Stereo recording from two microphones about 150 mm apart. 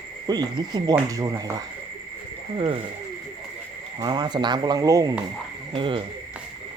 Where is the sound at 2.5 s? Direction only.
35° right (ahead or behind).